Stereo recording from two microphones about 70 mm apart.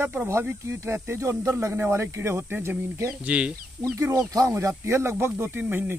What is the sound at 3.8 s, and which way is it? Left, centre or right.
Speech, right.